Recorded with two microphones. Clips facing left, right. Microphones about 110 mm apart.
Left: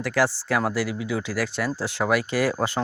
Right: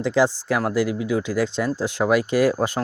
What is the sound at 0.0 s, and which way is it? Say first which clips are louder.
Speech: right 4 dB; 20° right (ahead or behind).